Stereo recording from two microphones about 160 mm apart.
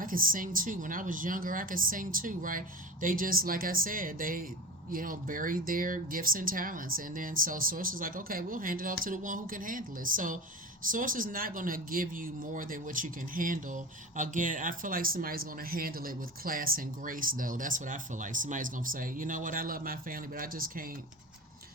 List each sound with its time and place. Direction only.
0.0 s speech: 60° right (ahead or behind)